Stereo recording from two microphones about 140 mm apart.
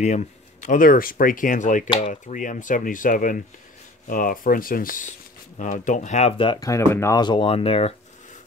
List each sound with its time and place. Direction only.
0.0 s speech: 55° left (ahead or behind); by 5.1 s 80° left
5.6 s speech: 60° left (ahead or behind); by 6.6 s 40° left (ahead or behind)
6.6 s speech: 20° left (ahead or behind)
7.2 s speech: 35° left (ahead or behind)